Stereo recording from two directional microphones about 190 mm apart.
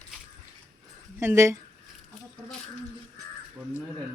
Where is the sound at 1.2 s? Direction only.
15° right (ahead or behind).